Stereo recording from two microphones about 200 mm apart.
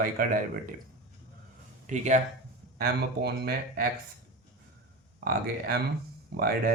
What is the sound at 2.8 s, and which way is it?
Speech, 55° right (ahead or behind).